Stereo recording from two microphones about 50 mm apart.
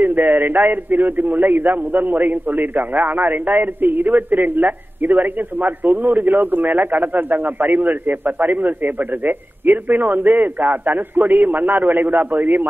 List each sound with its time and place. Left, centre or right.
0.0 s a man's voice: right